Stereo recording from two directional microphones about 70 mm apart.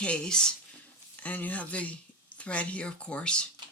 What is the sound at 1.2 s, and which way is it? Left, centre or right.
Speech, left.